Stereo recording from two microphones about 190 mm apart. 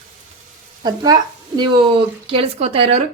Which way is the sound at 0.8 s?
20° right (ahead or behind).